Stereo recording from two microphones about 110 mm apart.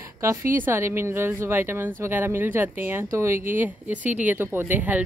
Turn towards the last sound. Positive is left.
turn(degrees=-15)  # may be behind; listen again after turning